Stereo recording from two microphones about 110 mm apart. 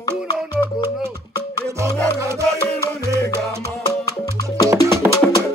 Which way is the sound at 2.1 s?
25° right (ahead or behind).